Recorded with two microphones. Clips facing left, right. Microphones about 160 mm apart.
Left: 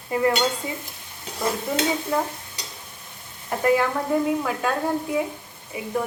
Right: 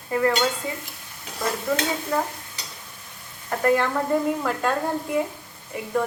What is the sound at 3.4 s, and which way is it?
A woman's voice, 10° left (ahead or behind).